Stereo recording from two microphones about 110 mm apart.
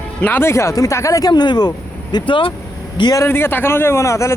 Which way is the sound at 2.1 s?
50° left (ahead or behind).